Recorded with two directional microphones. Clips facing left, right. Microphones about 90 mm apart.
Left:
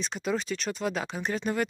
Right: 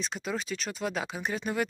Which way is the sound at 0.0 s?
Centre (ahead or behind).